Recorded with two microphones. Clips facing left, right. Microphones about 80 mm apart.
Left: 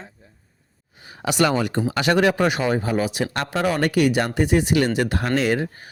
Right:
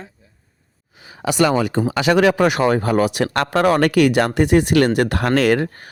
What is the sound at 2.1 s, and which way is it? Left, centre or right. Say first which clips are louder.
Speech: right 4 dB; right.